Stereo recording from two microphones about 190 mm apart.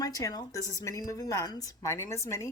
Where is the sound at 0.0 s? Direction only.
20° left (ahead or behind).